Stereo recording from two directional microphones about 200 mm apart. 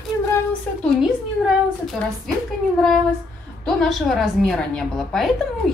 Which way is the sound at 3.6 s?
Centre (ahead or behind).